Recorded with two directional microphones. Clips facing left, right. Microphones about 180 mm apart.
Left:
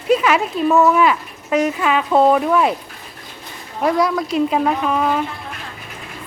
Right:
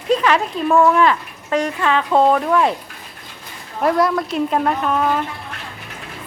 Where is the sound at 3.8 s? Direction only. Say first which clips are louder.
Even; centre (ahead or behind).